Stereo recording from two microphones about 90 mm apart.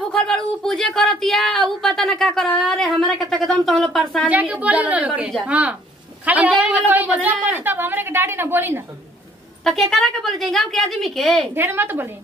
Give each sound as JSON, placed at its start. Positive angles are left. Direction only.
{"t": 0.1, "sound": "speech", "side_deg": 5}
{"t": 4.3, "sound": "a woman's voice", "side_deg": -15}
{"t": 9.7, "sound": "speech", "side_deg": 5}
{"t": 11.5, "sound": "a woman's voice", "side_deg": -25}